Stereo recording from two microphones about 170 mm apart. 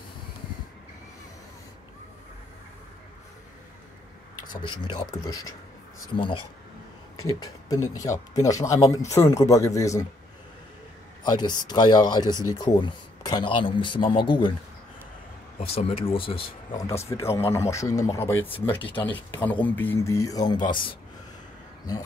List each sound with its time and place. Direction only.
4.8 s speech: 25° left (ahead or behind)
7.9 s speech: 20° left (ahead or behind)
11.2 s speech: 25° left (ahead or behind)
15.6 s speech: 35° left (ahead or behind)
16.7 s speech: 15° left (ahead or behind)
18.7 s speech: 30° left (ahead or behind)
19.4 s speech: 10° left (ahead or behind)